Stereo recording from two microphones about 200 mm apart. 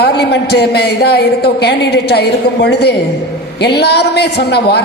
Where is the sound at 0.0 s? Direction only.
55° left (ahead or behind).